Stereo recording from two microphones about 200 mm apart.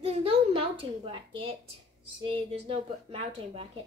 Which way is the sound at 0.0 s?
30° right (ahead or behind).